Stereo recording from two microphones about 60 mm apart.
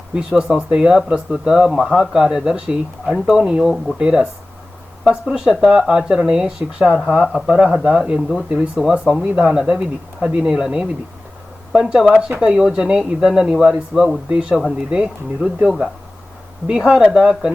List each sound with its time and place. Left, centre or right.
0.1 s speech: centre
15.6 s speech: centre
16.6 s speech: centre